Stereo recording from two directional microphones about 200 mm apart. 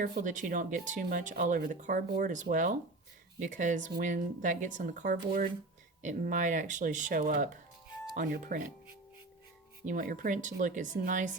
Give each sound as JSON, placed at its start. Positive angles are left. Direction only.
{"t": 0.0, "sound": "speech", "side_deg": -40}
{"t": 9.8, "sound": "speech", "side_deg": -45}